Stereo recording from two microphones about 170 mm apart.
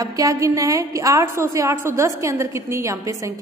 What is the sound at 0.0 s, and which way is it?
A woman's voice, 20° right (ahead or behind).